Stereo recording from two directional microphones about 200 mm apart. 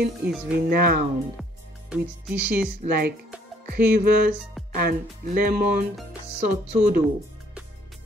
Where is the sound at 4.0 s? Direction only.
50° right (ahead or behind).